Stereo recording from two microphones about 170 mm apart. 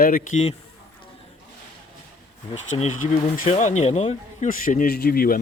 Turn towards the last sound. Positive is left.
turn(degrees=60)  # may be behind; listen again after turning